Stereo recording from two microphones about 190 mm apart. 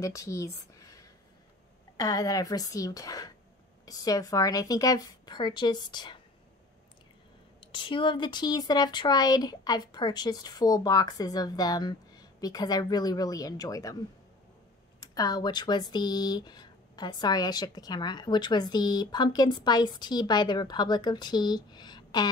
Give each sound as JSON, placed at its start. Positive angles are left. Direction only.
{"t": 0.0, "sound": "speech", "side_deg": 15}
{"t": 7.6, "sound": "speech", "side_deg": 25}
{"t": 15.0, "sound": "speech", "side_deg": 20}